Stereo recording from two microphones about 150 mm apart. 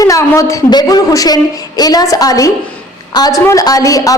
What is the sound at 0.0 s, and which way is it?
A woman's voice, 20° left (ahead or behind).